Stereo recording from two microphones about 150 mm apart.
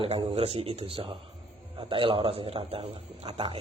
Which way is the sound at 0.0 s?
40° right (ahead or behind).